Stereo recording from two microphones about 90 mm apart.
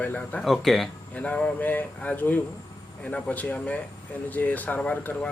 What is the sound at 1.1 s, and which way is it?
Speech, 15° left (ahead or behind).